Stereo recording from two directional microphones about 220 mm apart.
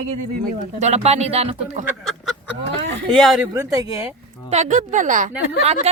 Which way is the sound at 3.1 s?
Centre (ahead or behind).